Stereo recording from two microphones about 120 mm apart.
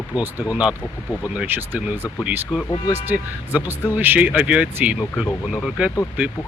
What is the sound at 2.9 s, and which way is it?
Speech, 15° right (ahead or behind).